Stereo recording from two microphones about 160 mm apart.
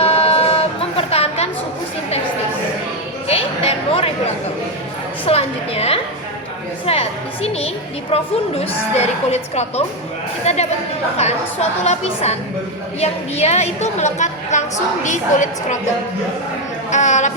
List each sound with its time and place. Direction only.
0.0 s music: 40° left (ahead or behind)
3.2 s a sound: 40° left (ahead or behind)
5.2 s a woman's voice: 40° left (ahead or behind)
11.8 s a woman's voice: 45° left (ahead or behind)
16.9 s a woman's voice: 50° left (ahead or behind)